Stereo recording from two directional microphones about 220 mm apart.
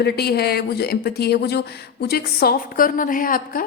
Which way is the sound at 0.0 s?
45° left (ahead or behind).